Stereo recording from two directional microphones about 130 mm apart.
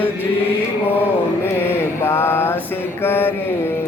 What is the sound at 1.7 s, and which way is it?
Mantra, 20° left (ahead or behind).